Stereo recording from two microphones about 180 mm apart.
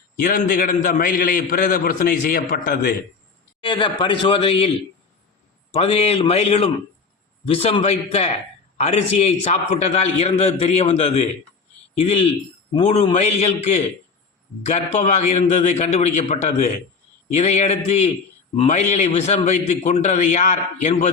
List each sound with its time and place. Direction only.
0.2 s a man's voice: 50° left (ahead or behind)
3.6 s a man's voice: 25° left (ahead or behind)
5.7 s a man's voice: 35° left (ahead or behind)